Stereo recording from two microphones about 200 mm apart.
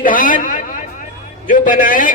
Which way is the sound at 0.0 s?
45° left (ahead or behind).